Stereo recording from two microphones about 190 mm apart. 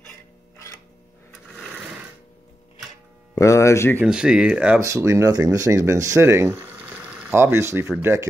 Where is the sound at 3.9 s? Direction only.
5° right (ahead or behind).